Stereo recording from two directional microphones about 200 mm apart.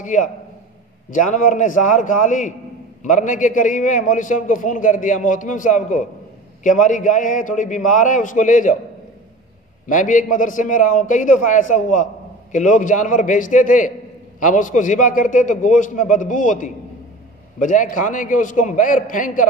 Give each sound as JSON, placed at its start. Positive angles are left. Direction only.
{"t": 0.0, "sound": "a man's voice", "side_deg": 40}
{"t": 9.8, "sound": "a man's voice", "side_deg": 40}